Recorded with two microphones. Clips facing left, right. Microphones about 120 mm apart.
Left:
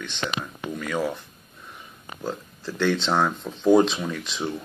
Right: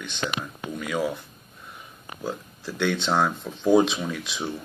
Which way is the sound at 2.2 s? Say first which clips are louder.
Left 1 dB; 10° right (ahead or behind).